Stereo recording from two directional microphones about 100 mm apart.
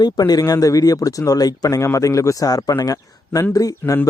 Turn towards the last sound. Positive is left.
turn(degrees=35)  # may be behind; listen again after turning